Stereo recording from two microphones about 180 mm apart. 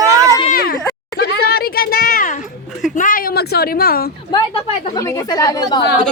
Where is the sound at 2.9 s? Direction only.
50° left (ahead or behind).